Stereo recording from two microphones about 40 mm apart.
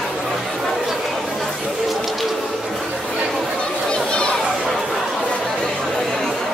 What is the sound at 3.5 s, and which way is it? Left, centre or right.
Children playing, centre.